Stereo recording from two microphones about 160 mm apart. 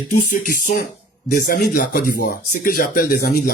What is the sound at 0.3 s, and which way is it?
Speech, 55° left (ahead or behind).